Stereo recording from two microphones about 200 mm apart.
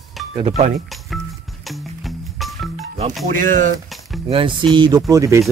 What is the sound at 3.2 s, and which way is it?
Speech, 40° right (ahead or behind).